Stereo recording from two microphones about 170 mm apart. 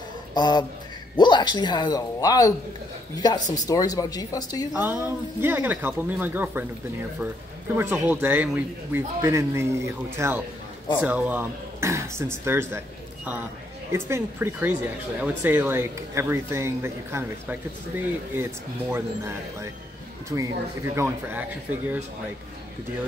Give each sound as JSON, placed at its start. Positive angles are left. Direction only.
{"t": 0.3, "sound": "speech", "side_deg": 25}
{"t": 4.7, "sound": "speech", "side_deg": -10}
{"t": 7.7, "sound": "speech", "side_deg": -15}